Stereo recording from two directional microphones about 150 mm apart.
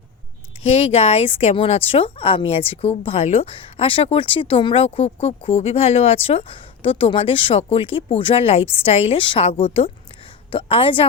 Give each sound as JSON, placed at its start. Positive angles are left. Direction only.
{"t": 0.6, "sound": "speech", "side_deg": 45}